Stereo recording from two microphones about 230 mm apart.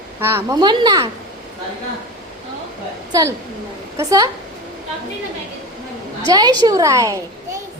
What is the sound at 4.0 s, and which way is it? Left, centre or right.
Speech, centre.